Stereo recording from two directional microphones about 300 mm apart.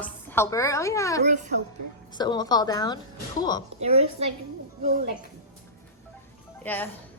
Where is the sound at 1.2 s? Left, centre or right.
Right.